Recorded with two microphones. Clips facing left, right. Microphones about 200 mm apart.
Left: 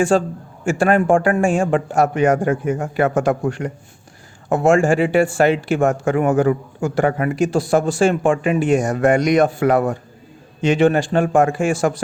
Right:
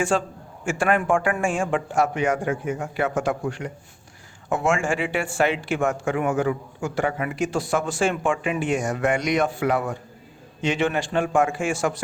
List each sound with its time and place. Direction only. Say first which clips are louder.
0.1 s speech: left 7 dB; 40° left (ahead or behind)